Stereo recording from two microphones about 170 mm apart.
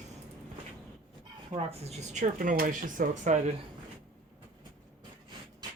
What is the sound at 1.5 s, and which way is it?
Speech, 35° right (ahead or behind).